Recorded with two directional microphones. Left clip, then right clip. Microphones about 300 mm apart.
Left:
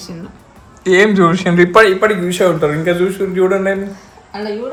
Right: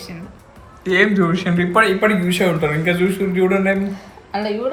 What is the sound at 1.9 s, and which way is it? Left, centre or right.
Speech, centre.